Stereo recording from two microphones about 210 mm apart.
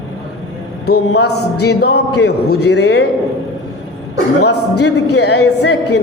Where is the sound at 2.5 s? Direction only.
55° left (ahead or behind).